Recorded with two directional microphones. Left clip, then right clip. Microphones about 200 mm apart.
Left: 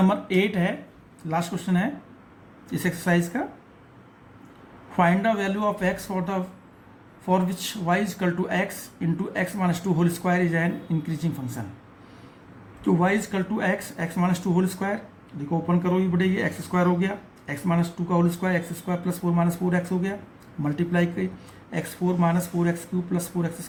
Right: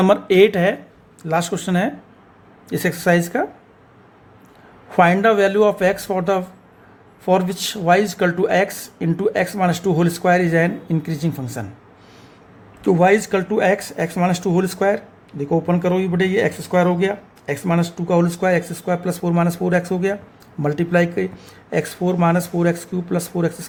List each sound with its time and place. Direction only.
0.0 s speech: 55° right (ahead or behind)
4.9 s speech: 55° right (ahead or behind)
12.8 s speech: 55° right (ahead or behind)